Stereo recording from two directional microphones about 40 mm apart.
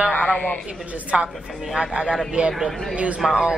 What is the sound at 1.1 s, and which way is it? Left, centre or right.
Speech, right.